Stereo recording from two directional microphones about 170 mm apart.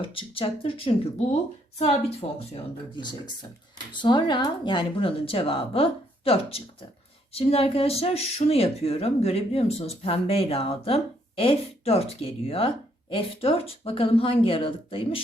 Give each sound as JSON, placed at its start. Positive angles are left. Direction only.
{"t": 0.0, "sound": "speech", "side_deg": 30}
{"t": 3.9, "sound": "speech", "side_deg": 25}